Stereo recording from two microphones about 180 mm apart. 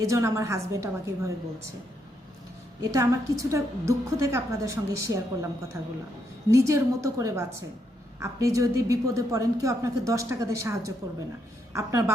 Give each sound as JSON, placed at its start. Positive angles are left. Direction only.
{"t": 0.0, "sound": "a woman's voice", "side_deg": -15}
{"t": 2.8, "sound": "a woman's voice", "side_deg": -20}